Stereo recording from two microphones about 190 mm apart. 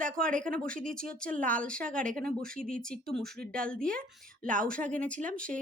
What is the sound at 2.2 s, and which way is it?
Speech, 50° right (ahead or behind).